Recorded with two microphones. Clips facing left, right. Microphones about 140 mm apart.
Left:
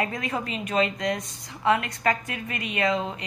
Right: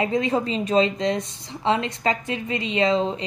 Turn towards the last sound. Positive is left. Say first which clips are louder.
# right 5 dB
turn(degrees=-30)  # may be behind; listen again after turning